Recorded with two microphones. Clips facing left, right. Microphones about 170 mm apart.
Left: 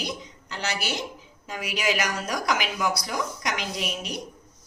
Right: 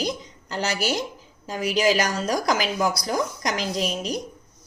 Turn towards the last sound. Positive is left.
turn(degrees=-35)  # may be behind; listen again after turning